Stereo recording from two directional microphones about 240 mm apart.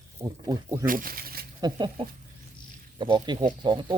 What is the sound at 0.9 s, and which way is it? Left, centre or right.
Speech, right.